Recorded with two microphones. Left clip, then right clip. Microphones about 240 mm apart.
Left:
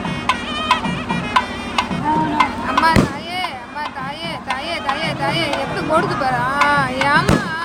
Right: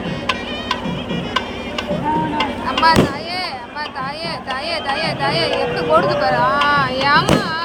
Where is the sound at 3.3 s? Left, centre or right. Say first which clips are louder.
Even; centre.